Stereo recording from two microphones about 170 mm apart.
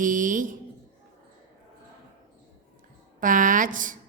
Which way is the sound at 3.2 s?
50° right (ahead or behind).